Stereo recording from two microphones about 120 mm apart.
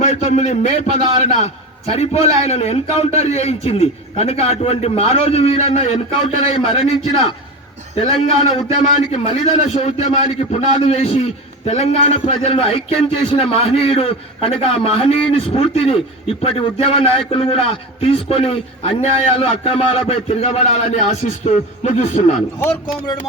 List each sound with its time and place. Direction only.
0.0 s a man's voice: 85° left
1.9 s a man's voice: 65° left (ahead or behind)